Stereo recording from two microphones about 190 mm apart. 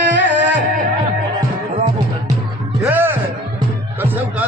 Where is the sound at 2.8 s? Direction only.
10° right (ahead or behind).